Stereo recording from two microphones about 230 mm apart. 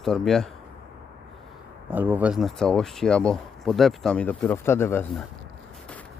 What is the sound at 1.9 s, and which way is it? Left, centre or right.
Speech, centre.